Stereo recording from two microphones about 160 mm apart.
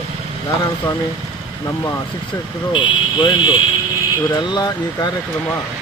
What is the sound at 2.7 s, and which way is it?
Speech, 30° left (ahead or behind).